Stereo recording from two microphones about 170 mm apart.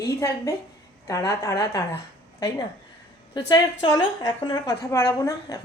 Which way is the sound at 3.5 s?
25° left (ahead or behind).